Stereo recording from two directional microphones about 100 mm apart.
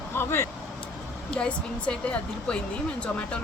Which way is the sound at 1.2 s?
10° left (ahead or behind).